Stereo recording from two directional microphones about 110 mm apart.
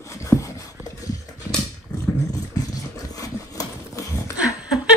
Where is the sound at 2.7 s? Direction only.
35° left (ahead or behind).